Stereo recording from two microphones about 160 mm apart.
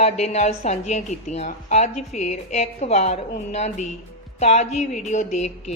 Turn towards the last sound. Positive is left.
turn(degrees=45)  # may be behind; listen again after turning